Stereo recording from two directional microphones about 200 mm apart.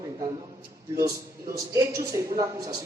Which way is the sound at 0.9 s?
15° right (ahead or behind).